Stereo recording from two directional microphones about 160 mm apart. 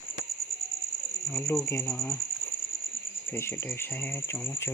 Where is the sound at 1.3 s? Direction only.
15° left (ahead or behind).